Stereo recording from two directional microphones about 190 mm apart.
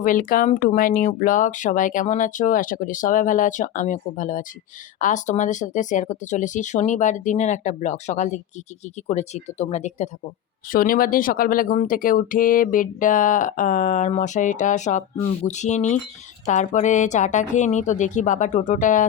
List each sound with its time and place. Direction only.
0.0 s speech: 45° left (ahead or behind)
10.7 s speech: 50° left (ahead or behind)